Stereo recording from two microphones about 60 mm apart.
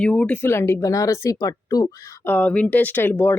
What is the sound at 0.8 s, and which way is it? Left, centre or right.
Speech, left.